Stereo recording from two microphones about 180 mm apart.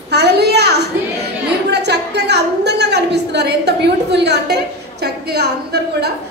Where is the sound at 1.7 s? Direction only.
70° right (ahead or behind).